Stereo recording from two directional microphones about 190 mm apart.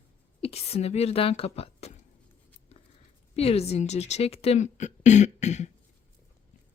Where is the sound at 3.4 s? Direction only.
30° left (ahead or behind).